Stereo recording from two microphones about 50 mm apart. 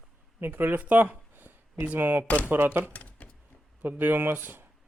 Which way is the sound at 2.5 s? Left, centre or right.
Right.